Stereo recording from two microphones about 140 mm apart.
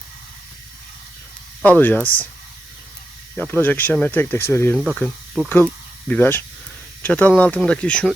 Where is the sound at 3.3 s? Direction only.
15° left (ahead or behind).